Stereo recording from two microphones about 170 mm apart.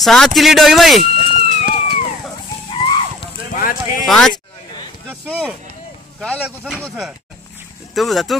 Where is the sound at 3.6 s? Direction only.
55° left (ahead or behind).